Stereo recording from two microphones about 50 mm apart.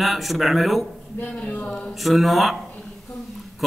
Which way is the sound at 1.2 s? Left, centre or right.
Left.